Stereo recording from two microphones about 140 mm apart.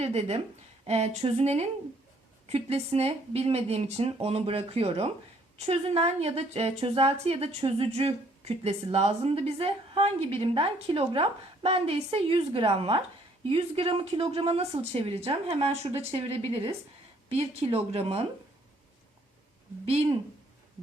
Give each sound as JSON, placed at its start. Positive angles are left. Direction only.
{"t": 0.0, "sound": "a woman's voice", "side_deg": -50}
{"t": 19.8, "sound": "a woman's voice", "side_deg": -45}